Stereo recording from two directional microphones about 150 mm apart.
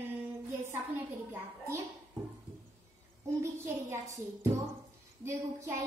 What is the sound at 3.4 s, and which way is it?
Child singing, 20° right (ahead or behind).